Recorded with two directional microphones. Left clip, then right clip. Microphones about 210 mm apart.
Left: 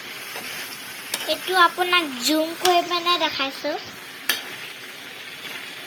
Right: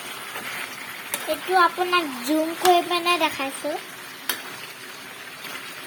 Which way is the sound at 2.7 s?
15° right (ahead or behind).